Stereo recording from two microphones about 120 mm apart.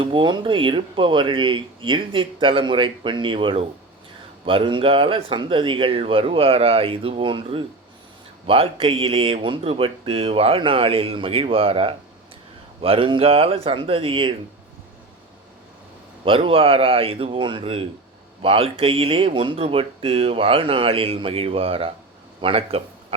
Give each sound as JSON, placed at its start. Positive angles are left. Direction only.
{"t": 0.0, "sound": "speech", "side_deg": -45}
{"t": 16.2, "sound": "speech", "side_deg": -50}